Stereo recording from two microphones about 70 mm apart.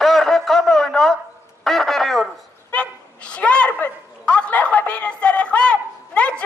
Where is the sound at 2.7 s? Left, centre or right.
Centre.